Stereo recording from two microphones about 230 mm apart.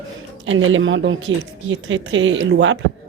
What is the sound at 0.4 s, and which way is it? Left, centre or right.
Speech, right.